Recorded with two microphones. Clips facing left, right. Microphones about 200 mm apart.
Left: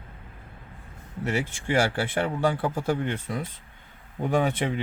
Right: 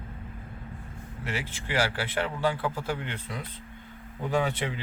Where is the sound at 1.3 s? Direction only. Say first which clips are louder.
Left 6 dB; 50° left (ahead or behind).